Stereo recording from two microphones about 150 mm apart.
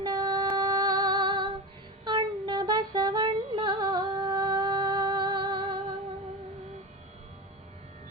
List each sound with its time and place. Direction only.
0.0 s female singing: 25° right (ahead or behind)
2.0 s music: 30° right (ahead or behind)